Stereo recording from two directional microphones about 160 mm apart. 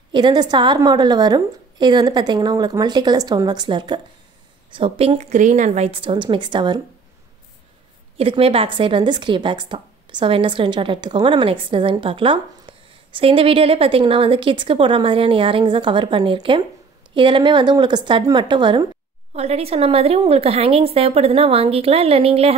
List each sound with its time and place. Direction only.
0.1 s a woman's voice: 25° right (ahead or behind)
8.2 s a woman's voice: 35° right (ahead or behind)
19.3 s a woman's voice: 40° right (ahead or behind)